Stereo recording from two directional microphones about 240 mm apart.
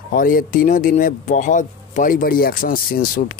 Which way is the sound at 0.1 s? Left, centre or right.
Left.